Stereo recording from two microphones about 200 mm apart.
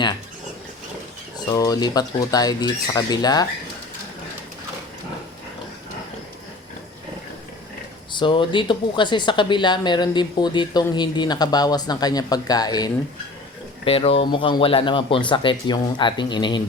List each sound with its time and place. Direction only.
1.5 s speech: 20° left (ahead or behind)
8.1 s speech: 25° left (ahead or behind)